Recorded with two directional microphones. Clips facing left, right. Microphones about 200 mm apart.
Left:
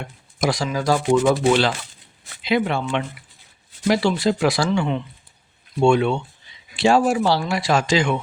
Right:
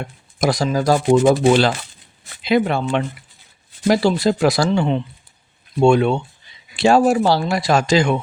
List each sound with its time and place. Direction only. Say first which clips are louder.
0.3 s speech: right 4 dB; 40° right (ahead or behind)